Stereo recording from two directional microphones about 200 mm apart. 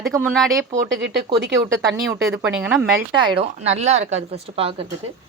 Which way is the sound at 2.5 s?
5° right (ahead or behind).